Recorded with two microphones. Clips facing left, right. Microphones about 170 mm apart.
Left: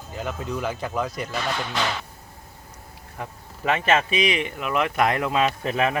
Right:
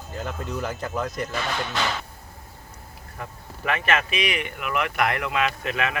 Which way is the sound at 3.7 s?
25° left (ahead or behind).